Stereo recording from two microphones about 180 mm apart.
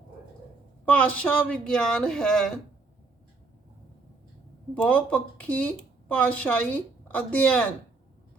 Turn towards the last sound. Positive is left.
turn(degrees=10)  # may be behind; listen again after turning